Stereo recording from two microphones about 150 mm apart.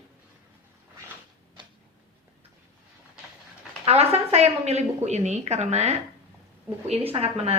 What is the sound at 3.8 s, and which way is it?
A woman's voice, 45° right (ahead or behind).